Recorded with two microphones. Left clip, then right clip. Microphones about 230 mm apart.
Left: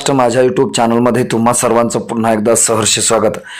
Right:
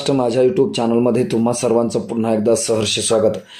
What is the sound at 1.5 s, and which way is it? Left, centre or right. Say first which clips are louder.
A man's voice: left 8 dB; centre.